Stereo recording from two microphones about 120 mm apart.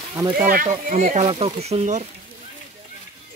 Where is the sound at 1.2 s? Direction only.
50° right (ahead or behind); by 2.0 s 70° right (ahead or behind).